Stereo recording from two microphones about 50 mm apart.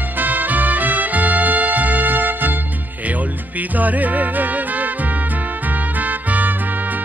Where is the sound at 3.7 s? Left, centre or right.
Right.